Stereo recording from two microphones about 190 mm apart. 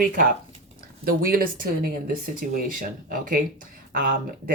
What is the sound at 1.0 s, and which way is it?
Speech, 50° right (ahead or behind).